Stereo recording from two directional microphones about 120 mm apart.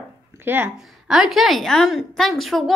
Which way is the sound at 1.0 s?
5° right (ahead or behind).